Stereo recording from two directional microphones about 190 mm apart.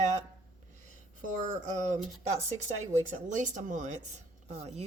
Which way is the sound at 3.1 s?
40° right (ahead or behind).